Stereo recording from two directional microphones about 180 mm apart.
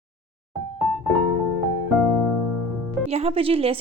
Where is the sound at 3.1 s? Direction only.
35° right (ahead or behind).